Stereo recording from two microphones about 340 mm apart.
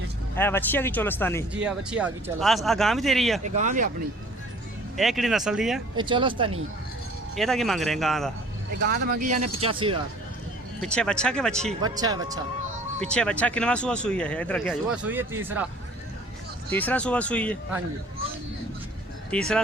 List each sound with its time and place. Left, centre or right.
0.3 s speech: centre
1.5 s speech: centre
3.4 s speech: right
4.9 s speech: centre
6.0 s speech: centre
7.3 s speech: centre
8.8 s speech: right
10.8 s speech: centre
11.7 s speech: centre
13.1 s speech: centre
16.7 s speech: centre
19.3 s speech: centre